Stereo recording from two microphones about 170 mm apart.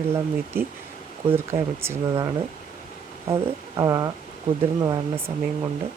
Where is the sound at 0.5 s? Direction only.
10° right (ahead or behind).